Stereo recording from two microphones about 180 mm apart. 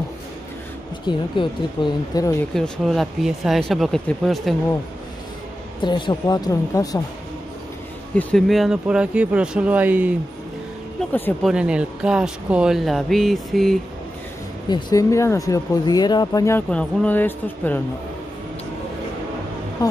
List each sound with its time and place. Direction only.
1.0 s speech: 25° left (ahead or behind)
2.5 s speech: centre (ahead or behind)
5.8 s speech: 25° left (ahead or behind)
8.2 s speech: 5° left (ahead or behind)
11.4 s speech: 5° right (ahead or behind)
14.7 s speech: 20° left (ahead or behind)